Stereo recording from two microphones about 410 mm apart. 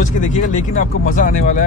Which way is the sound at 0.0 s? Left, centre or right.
Centre.